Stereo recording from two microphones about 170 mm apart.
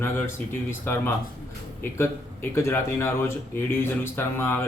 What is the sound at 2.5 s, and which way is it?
A man's voice, 15° left (ahead or behind).